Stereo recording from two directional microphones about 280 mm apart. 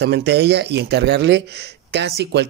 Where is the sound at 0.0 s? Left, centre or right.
Right.